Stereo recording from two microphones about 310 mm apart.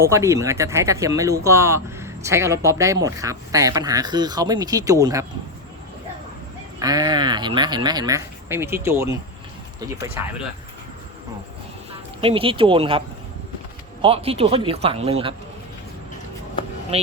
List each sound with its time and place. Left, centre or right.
0.1 s speech: centre
6.7 s speech: centre
10.2 s speech: centre
12.2 s speech: centre
14.0 s speech: centre
16.9 s speech: centre